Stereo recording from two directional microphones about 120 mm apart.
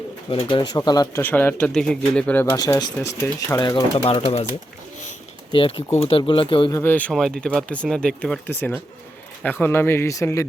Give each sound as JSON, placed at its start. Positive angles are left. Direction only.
{"t": 0.3, "sound": "speech", "side_deg": 45}
{"t": 1.1, "sound": "speech", "side_deg": 15}
{"t": 2.5, "sound": "speech", "side_deg": 30}
{"t": 3.9, "sound": "speech", "side_deg": 50}
{"t": 5.5, "sound": "speech", "side_deg": 50}
{"t": 6.7, "sound": "speech", "side_deg": 25}
{"t": 7.1, "sound": "speech", "side_deg": 5}
{"t": 8.4, "sound": "speech", "side_deg": 20}